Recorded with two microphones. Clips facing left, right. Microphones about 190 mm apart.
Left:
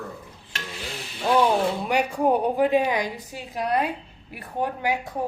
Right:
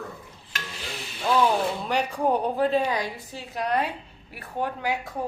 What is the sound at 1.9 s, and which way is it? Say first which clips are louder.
A woman's voice: left 2 dB; 10° left (ahead or behind).